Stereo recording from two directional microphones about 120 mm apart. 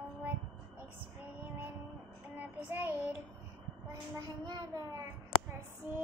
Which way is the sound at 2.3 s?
15° right (ahead or behind).